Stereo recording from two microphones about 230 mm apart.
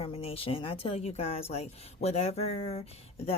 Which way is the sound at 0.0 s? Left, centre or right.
Left.